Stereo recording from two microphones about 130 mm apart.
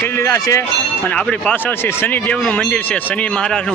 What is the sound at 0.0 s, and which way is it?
Speech, 20° left (ahead or behind).